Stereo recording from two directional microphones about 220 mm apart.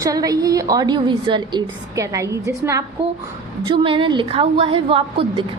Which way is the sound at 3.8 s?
20° right (ahead or behind).